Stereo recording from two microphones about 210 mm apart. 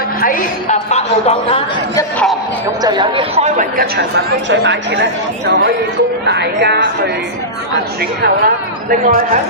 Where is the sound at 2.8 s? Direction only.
20° right (ahead or behind); by 8.5 s 50° right (ahead or behind).